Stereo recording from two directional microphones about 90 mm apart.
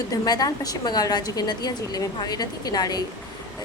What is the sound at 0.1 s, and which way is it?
A woman's voice, 45° left (ahead or behind).